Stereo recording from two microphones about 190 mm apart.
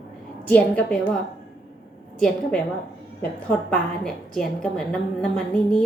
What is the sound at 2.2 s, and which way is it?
Speech, centre (ahead or behind).